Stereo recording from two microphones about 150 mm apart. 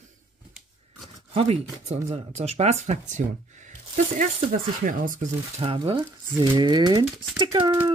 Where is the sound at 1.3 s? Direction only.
40° right (ahead or behind); by 5.2 s 65° right (ahead or behind).